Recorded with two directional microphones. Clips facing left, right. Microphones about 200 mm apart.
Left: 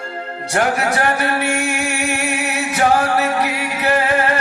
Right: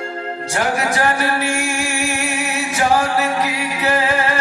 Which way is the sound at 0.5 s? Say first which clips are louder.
Left 2 dB; 60° left (ahead or behind).